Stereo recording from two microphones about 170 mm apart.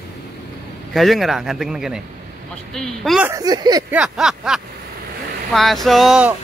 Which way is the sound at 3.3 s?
20° right (ahead or behind).